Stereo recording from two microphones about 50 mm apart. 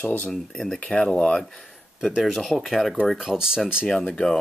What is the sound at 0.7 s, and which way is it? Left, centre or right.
Speech, left.